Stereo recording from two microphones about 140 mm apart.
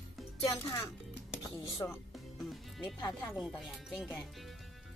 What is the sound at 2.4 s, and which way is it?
Speech, centre (ahead or behind).